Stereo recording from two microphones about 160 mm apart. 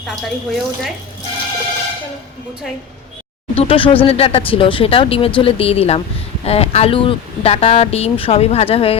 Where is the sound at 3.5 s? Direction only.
35° left (ahead or behind).